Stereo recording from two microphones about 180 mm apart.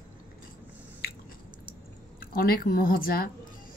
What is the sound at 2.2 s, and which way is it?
A woman's voice, 55° left (ahead or behind).